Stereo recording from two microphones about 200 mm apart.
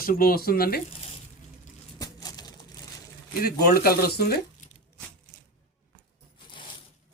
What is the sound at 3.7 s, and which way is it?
Speech, 50° left (ahead or behind).